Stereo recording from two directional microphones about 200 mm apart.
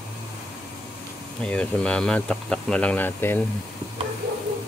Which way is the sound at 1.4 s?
5° left (ahead or behind).